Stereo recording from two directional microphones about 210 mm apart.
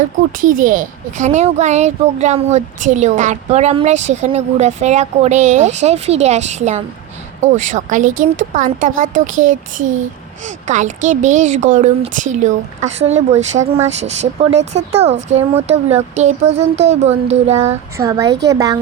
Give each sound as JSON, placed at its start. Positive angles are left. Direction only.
{"t": 0.3, "sound": "a woman's voice", "side_deg": -40}
{"t": 9.7, "sound": "speech", "side_deg": -65}
{"t": 10.4, "sound": "a woman's voice", "side_deg": -35}
{"t": 17.9, "sound": "speech", "side_deg": -15}
{"t": 18.3, "sound": "speech", "side_deg": -55}
{"t": 18.5, "sound": "speech", "side_deg": -15}